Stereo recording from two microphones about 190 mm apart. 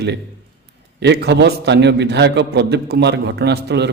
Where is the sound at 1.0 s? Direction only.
60° right (ahead or behind).